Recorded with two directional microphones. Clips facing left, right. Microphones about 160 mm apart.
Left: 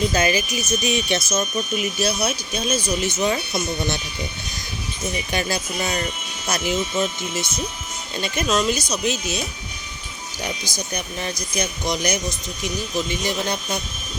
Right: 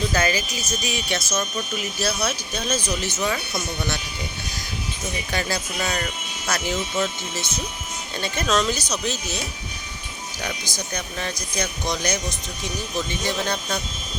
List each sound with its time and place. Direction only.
0.1 s speech: 15° left (ahead or behind)
5.3 s speech: 15° left (ahead or behind)
10.4 s speech: 15° left (ahead or behind)
13.2 s speech: 15° left (ahead or behind)